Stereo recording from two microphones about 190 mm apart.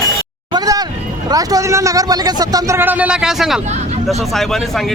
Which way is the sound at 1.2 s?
20° right (ahead or behind).